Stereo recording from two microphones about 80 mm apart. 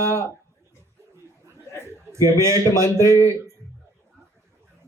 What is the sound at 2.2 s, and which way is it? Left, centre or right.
A man's voice, right.